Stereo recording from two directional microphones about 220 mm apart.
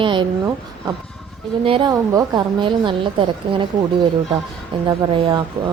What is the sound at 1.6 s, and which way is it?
A woman's voice, 20° right (ahead or behind).